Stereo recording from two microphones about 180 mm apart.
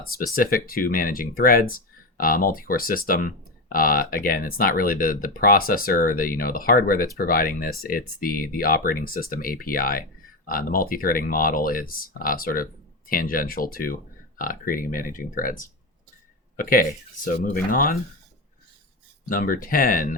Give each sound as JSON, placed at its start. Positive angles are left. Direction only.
{"t": 0.0, "sound": "speech", "side_deg": 50}
{"t": 16.6, "sound": "speech", "side_deg": 50}
{"t": 19.3, "sound": "speech", "side_deg": 50}